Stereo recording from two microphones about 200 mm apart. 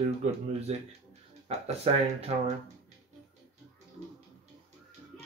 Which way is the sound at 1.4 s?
30° right (ahead or behind).